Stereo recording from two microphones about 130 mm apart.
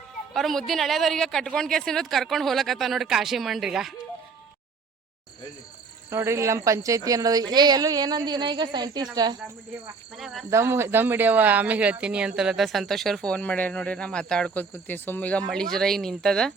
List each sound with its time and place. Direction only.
0.3 s speech: centre (ahead or behind)
6.1 s speech: 20° right (ahead or behind)
10.2 s speech: centre (ahead or behind)
10.5 s speech: 20° right (ahead or behind); by 16.5 s 5° left (ahead or behind)